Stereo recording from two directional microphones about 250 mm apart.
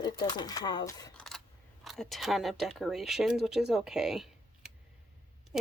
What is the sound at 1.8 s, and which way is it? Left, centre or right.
Speech, centre.